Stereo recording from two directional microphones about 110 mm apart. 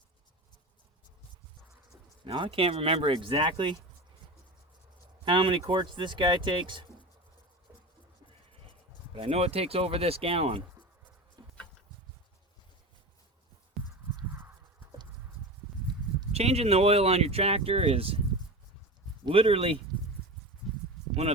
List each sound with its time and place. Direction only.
2.2 s speech: 50° right (ahead or behind)
5.2 s speech: 50° right (ahead or behind)
9.1 s speech: 60° right (ahead or behind)
11.4 s a sound: 35° right (ahead or behind)
16.3 s speech: 70° right (ahead or behind)
19.3 s speech: 60° right (ahead or behind)
20.7 s a sound: centre (ahead or behind)